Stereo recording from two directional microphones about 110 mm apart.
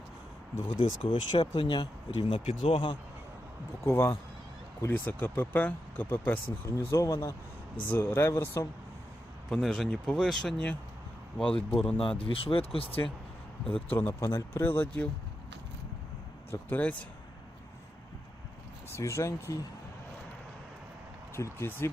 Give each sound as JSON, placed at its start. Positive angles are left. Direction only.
{"t": 0.8, "sound": "speech", "side_deg": 45}
{"t": 3.8, "sound": "speech", "side_deg": 25}
{"t": 6.7, "sound": "speech", "side_deg": 30}
{"t": 7.8, "sound": "speech", "side_deg": 20}
{"t": 9.5, "sound": "speech", "side_deg": 0}
{"t": 12.2, "sound": "speech", "side_deg": 55}
{"t": 13.9, "sound": "speech", "side_deg": 25}
{"t": 16.5, "sound": "speech", "side_deg": 15}
{"t": 18.9, "sound": "speech", "side_deg": 25}
{"t": 21.3, "sound": "speech", "side_deg": 25}